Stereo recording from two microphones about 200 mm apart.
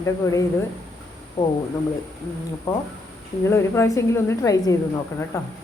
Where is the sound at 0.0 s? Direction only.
15° left (ahead or behind).